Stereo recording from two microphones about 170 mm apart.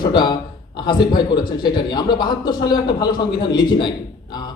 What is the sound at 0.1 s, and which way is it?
A man's voice, 25° left (ahead or behind).